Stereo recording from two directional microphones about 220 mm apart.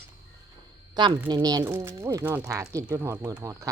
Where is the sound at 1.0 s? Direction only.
20° right (ahead or behind).